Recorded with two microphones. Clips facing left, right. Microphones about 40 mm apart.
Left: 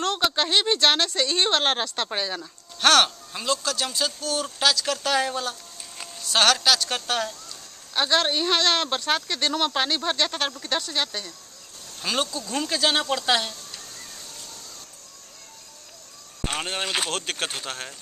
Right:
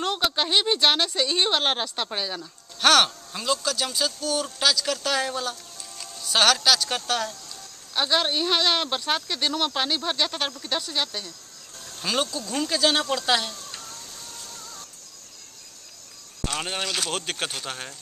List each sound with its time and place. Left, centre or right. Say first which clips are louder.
0.0 s speech: left 1 dB; centre
16.5 s speech: left 1 dB; left
17.1 s speech: left 1 dB; centre